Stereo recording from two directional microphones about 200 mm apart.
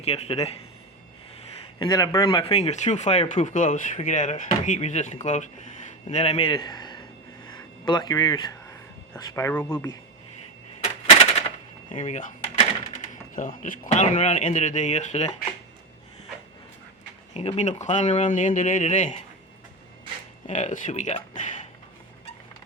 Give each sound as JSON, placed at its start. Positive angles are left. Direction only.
{"t": 0.0, "sound": "speech", "side_deg": 30}
{"t": 1.4, "sound": "a man's voice", "side_deg": 20}
{"t": 7.4, "sound": "a sound", "side_deg": 20}
{"t": 9.1, "sound": "speech", "side_deg": 15}
{"t": 10.8, "sound": "a sound", "side_deg": 30}
{"t": 11.9, "sound": "door", "side_deg": 35}
{"t": 13.6, "sound": "speech", "side_deg": 40}
{"t": 17.3, "sound": "speech", "side_deg": 35}
{"t": 20.5, "sound": "speech", "side_deg": 40}